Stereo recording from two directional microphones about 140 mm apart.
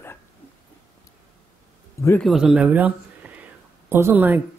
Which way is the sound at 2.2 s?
Centre (ahead or behind).